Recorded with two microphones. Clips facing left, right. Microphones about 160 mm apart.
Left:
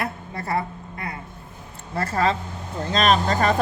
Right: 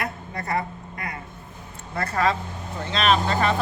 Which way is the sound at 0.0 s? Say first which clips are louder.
Left 1 dB; 30° left (ahead or behind).